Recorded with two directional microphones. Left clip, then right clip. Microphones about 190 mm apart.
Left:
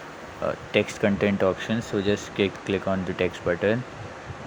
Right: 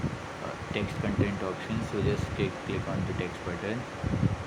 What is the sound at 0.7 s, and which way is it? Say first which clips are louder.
Speech: left 9 dB; 50° left (ahead or behind).